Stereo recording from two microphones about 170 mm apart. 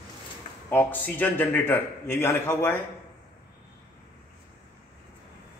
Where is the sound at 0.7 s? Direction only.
10° left (ahead or behind).